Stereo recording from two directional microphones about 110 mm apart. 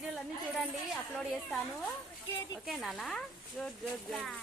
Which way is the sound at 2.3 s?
25° left (ahead or behind).